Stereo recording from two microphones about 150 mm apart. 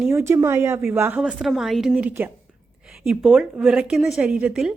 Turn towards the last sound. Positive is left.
turn(degrees=-5)  # may be behind; listen again after turning